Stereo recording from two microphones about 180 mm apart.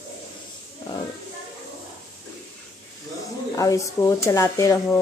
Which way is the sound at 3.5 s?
20° left (ahead or behind).